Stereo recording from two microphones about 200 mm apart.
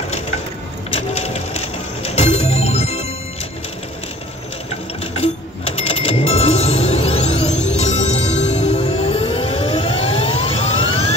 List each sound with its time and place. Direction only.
0.9 s music: 30° left (ahead or behind)
5.1 s music: 30° left (ahead or behind)